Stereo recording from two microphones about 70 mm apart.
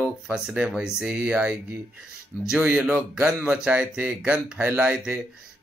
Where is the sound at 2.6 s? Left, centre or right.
Centre.